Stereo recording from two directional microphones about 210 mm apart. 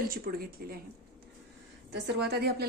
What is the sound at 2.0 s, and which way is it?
Speech, 50° right (ahead or behind).